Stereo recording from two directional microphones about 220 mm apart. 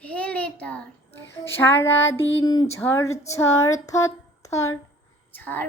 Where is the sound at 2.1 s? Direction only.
55° left (ahead or behind).